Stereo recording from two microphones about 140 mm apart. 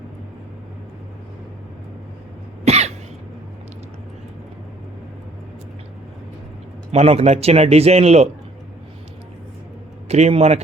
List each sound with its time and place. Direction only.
2.6 s cough: 50° right (ahead or behind)
6.9 s a man's voice: 45° right (ahead or behind)
10.1 s a man's voice: 50° right (ahead or behind)